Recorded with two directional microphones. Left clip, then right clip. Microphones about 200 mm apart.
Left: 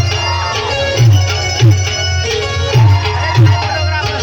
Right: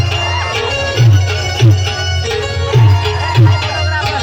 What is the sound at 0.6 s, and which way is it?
Music, 10° right (ahead or behind).